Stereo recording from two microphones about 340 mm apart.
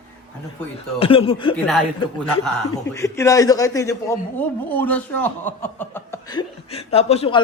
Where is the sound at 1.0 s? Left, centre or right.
Centre.